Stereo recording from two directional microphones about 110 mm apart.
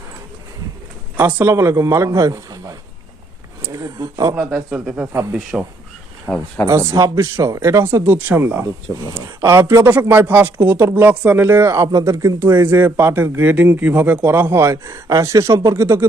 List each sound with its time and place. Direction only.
1.1 s speech: 20° right (ahead or behind)
4.7 s speech: 10° right (ahead or behind)
6.3 s speech: 5° left (ahead or behind)
6.7 s speech: 30° right (ahead or behind)